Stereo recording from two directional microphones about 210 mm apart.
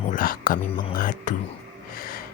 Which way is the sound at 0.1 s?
40° left (ahead or behind).